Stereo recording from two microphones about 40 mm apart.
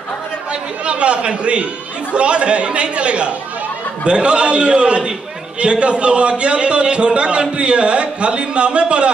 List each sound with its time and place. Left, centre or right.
0.5 s a man's voice: right